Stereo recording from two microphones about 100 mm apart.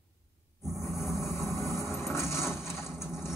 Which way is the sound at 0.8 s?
Centre (ahead or behind).